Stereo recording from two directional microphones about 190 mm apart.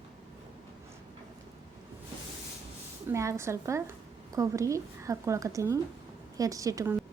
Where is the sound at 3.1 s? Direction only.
15° right (ahead or behind).